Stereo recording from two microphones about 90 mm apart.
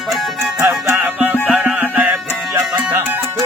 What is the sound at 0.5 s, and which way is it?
Music, 30° right (ahead or behind).